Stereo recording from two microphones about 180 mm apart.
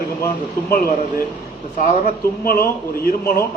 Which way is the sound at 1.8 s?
55° left (ahead or behind).